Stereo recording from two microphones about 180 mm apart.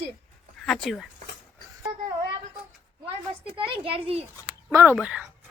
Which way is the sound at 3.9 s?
30° right (ahead or behind).